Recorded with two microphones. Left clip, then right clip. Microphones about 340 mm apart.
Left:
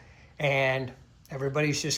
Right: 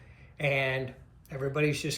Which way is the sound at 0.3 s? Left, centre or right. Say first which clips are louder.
Left 3 dB; centre.